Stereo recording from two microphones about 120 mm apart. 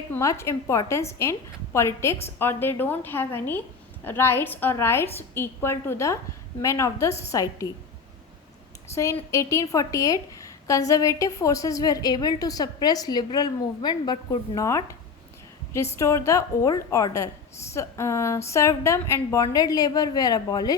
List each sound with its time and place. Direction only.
0.1 s a woman's voice: 25° left (ahead or behind)
8.9 s a woman's voice: 25° left (ahead or behind)
16.0 s a woman's voice: 25° left (ahead or behind)